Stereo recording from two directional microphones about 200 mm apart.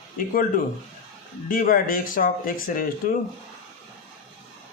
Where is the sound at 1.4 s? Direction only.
45° left (ahead or behind).